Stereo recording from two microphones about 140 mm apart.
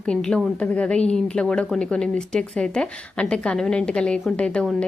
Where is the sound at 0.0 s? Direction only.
5° left (ahead or behind).